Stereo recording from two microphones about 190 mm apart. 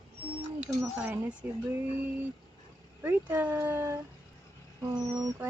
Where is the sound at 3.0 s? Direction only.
10° right (ahead or behind).